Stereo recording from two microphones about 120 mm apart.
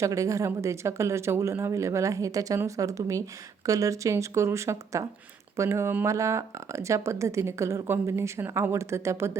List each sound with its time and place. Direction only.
0.0 s speech: 25° right (ahead or behind)